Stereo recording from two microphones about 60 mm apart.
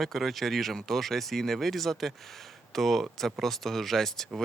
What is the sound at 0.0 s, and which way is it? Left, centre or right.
Speech, centre.